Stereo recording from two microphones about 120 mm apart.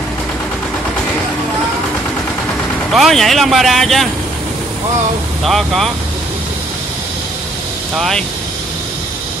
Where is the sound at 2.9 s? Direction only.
Centre (ahead or behind).